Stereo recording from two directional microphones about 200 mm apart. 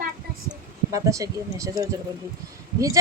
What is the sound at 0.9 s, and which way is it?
Speech, 15° right (ahead or behind).